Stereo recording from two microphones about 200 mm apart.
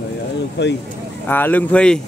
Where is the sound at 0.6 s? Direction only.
55° left (ahead or behind).